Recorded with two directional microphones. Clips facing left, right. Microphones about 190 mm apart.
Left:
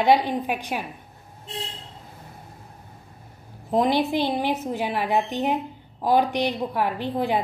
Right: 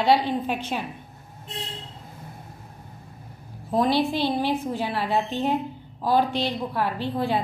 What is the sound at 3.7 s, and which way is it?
A woman's voice, 20° left (ahead or behind).